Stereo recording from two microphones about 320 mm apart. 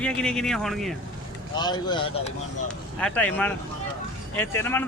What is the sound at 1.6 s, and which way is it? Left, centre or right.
A man's voice, centre.